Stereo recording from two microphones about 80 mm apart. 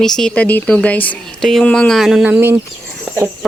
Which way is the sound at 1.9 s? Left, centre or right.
Centre.